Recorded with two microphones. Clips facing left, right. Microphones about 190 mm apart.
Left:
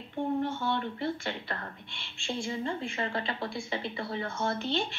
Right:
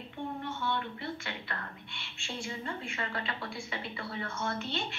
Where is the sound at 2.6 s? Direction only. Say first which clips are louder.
Left 5 dB; 30° left (ahead or behind).